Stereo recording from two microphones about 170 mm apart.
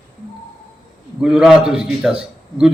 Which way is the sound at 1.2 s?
5° right (ahead or behind).